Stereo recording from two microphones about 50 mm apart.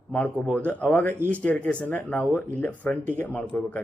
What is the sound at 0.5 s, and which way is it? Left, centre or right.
Speech, left.